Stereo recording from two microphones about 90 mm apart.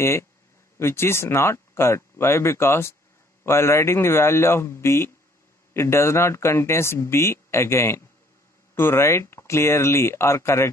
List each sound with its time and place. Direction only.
0.0 s speech: 30° left (ahead or behind)